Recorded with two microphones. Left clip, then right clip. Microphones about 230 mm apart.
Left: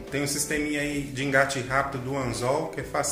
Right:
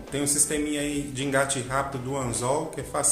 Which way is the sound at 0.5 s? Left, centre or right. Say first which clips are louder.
Even; centre.